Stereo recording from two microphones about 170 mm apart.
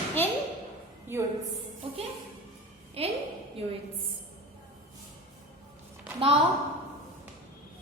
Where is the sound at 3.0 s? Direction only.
35° right (ahead or behind).